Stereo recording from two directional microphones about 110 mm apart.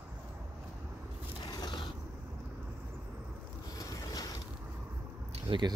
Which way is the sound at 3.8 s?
30° left (ahead or behind).